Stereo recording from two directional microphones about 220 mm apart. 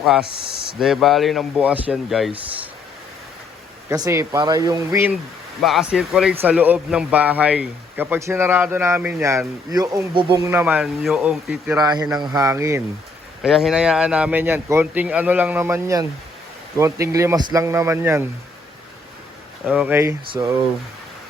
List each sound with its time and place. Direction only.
0.0 s speech: centre (ahead or behind)
3.8 s speech: 15° right (ahead or behind)
5.6 s speech: centre (ahead or behind)
11.8 s speech: 20° right (ahead or behind)
13.4 s speech: centre (ahead or behind)
19.6 s speech: 5° right (ahead or behind)